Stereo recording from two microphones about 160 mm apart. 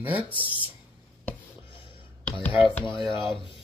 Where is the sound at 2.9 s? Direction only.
30° left (ahead or behind).